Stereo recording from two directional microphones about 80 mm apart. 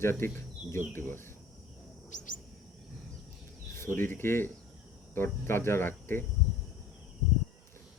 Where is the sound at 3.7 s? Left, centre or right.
Left.